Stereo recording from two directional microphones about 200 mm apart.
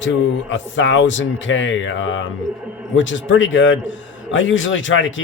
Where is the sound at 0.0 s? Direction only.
65° left (ahead or behind).